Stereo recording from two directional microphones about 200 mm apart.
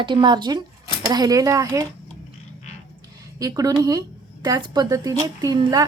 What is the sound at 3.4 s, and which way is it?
A woman's voice, 20° right (ahead or behind).